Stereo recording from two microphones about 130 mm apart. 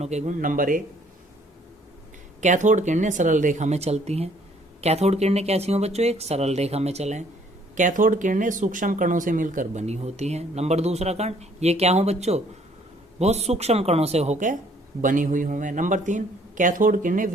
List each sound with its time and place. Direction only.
0.0 s speech: 60° right (ahead or behind); by 0.8 s 90° right
2.4 s speech: 70° right (ahead or behind)
7.8 s speech: 85° right
9.8 s speech: 55° right (ahead or behind)
15.0 s a man's voice: 90° right